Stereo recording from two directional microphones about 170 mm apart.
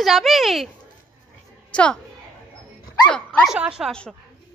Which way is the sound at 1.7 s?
5° left (ahead or behind).